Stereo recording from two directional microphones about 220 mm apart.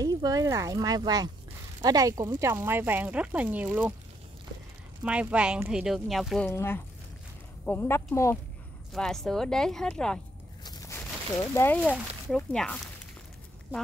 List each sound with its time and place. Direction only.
0.0 s speech: 15° right (ahead or behind)
5.0 s speech: 5° right (ahead or behind); by 8.4 s 10° left (ahead or behind)
8.9 s speech: centre (ahead or behind)
10.6 s a sound: 15° left (ahead or behind)
11.5 s speech: 10° left (ahead or behind)